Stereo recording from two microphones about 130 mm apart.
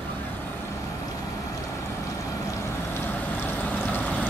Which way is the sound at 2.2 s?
20° left (ahead or behind).